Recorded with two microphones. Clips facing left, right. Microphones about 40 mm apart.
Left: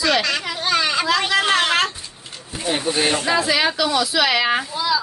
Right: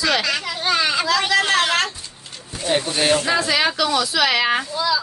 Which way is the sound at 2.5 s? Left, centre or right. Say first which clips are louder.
Even; centre.